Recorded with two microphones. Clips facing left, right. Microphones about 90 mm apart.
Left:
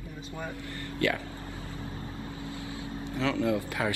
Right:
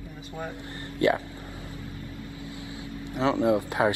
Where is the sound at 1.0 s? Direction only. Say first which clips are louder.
Right 6 dB; 20° right (ahead or behind).